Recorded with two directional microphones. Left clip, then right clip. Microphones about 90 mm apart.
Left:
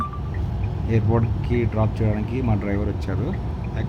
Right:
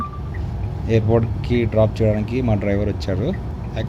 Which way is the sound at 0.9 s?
45° right (ahead or behind).